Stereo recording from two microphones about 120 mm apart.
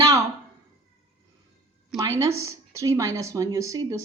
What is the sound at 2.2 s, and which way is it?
A woman's voice, 25° right (ahead or behind).